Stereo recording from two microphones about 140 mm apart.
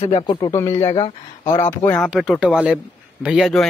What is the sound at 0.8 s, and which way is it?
Speech, 40° left (ahead or behind).